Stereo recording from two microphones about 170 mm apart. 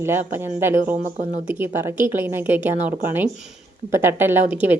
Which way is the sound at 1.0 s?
45° right (ahead or behind).